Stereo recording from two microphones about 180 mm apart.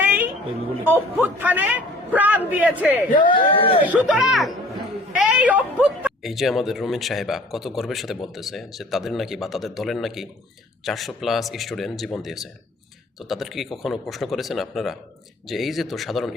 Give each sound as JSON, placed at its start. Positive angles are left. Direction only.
{"t": 0.0, "sound": "a sound", "side_deg": -10}
{"t": 0.9, "sound": "a man's voice", "side_deg": -10}
{"t": 3.2, "sound": "speech", "side_deg": 25}
{"t": 3.8, "sound": "speech", "side_deg": -5}